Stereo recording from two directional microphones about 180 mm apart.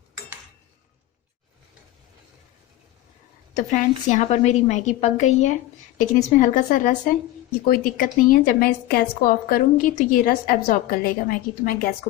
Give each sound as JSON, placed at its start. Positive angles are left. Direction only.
{"t": 3.5, "sound": "a woman's voice", "side_deg": 45}